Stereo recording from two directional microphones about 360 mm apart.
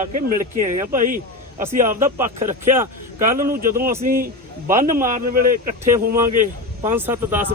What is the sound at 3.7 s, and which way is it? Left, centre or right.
Speech, centre.